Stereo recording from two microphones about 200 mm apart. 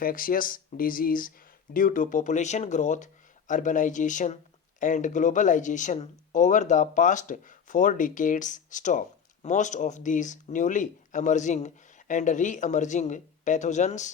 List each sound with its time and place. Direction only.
0.0 s speech: 45° left (ahead or behind)